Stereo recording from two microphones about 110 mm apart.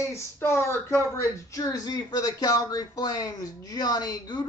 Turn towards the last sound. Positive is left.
turn(degrees=40)  # may be behind; listen again after turning